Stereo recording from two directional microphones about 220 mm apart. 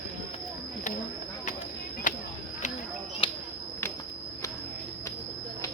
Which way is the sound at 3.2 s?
25° left (ahead or behind).